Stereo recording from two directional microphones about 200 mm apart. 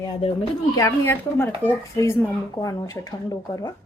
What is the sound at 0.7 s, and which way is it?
A woman's voice, 15° left (ahead or behind).